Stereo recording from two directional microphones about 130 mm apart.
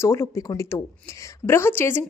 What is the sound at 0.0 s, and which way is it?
Speech, 20° left (ahead or behind).